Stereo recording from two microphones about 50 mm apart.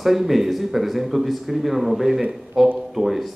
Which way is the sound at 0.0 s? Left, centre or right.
Centre.